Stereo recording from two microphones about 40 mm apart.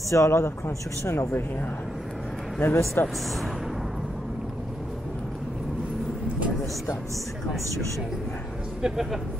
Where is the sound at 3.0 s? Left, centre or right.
Left.